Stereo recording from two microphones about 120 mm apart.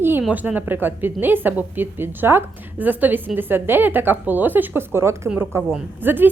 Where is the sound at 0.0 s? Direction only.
15° right (ahead or behind).